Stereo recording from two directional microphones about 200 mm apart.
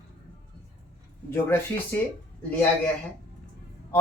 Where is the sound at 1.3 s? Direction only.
10° left (ahead or behind).